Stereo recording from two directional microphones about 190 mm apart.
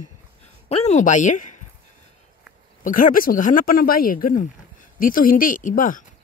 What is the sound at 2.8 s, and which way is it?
Speech, 45° left (ahead or behind).